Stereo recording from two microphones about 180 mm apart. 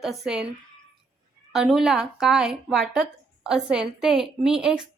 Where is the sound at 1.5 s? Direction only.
Centre (ahead or behind).